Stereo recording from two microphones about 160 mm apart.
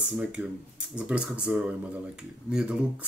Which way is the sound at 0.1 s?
5° right (ahead or behind).